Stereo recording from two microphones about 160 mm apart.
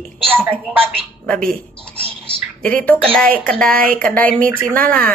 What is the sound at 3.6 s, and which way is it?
Speech, 65° right (ahead or behind).